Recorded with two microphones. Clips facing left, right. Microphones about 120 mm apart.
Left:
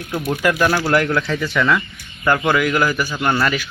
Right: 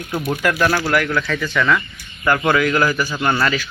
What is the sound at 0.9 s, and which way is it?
A man's voice, 25° left (ahead or behind).